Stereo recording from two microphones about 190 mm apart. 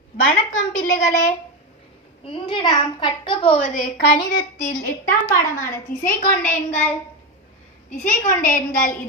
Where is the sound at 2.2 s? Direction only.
25° left (ahead or behind).